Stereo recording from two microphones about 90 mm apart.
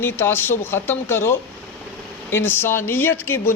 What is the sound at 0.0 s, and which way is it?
Speech, 25° left (ahead or behind).